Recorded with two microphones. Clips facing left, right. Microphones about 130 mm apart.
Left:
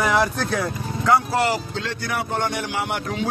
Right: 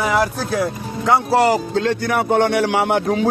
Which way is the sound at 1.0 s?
25° right (ahead or behind).